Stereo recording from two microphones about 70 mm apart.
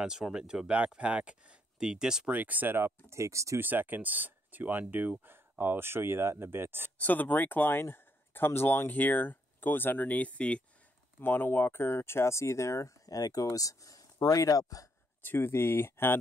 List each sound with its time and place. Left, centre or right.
0.0 s speech: centre
2.3 s speech: right
3.1 s speech: right
3.5 s speech: right
7.0 s speech: left
11.1 s speech: left
15.2 s speech: left